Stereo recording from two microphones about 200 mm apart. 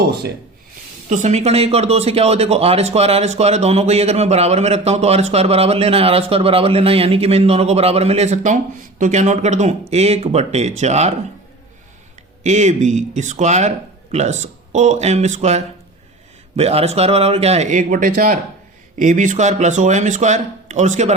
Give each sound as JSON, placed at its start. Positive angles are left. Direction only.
{"t": 1.1, "sound": "speech", "side_deg": -35}
{"t": 12.4, "sound": "speech", "side_deg": -35}